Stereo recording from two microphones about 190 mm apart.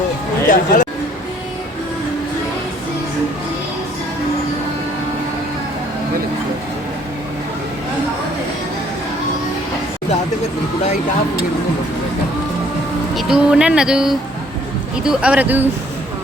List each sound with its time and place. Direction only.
0.4 s speech: 45° left (ahead or behind)
13.1 s speech: 5° right (ahead or behind)